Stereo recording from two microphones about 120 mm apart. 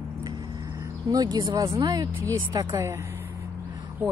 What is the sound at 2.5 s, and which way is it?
Speech, 40° right (ahead or behind).